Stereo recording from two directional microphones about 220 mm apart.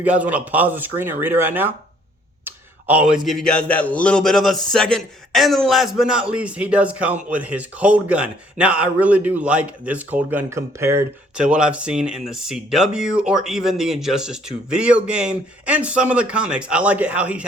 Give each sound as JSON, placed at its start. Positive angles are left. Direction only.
{"t": 0.0, "sound": "speech", "side_deg": -5}
{"t": 2.4, "sound": "a sound", "side_deg": -5}
{"t": 3.2, "sound": "a man's voice", "side_deg": 0}